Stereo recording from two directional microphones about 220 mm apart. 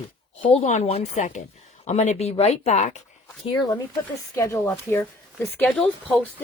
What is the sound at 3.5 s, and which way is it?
Speech, 20° left (ahead or behind).